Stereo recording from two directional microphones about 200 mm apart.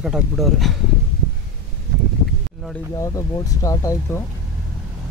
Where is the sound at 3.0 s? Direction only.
15° left (ahead or behind).